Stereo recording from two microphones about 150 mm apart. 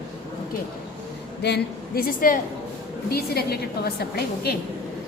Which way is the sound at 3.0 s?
90° left.